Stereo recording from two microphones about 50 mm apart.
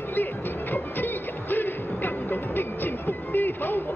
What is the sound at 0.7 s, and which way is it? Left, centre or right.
Music, left.